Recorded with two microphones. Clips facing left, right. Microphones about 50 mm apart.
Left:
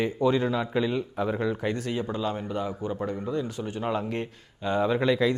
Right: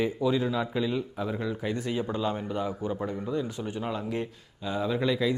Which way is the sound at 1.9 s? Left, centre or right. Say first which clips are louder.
Even; centre.